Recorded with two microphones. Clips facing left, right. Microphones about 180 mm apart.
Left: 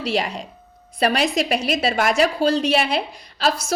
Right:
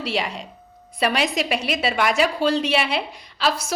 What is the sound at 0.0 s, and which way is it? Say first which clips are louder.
A woman's voice: left 3 dB; 40° left (ahead or behind).